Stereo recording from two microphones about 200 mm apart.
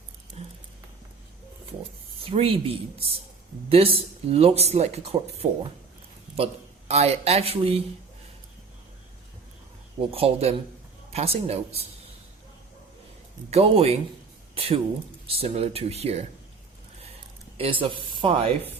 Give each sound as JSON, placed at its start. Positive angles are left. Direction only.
{"t": 2.2, "sound": "a man's voice", "side_deg": -30}
{"t": 10.0, "sound": "speech", "side_deg": -30}
{"t": 13.5, "sound": "speech", "side_deg": -30}
{"t": 17.6, "sound": "speech", "side_deg": -25}